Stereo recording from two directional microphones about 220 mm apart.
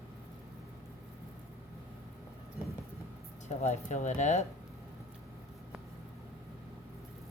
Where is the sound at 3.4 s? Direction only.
30° left (ahead or behind).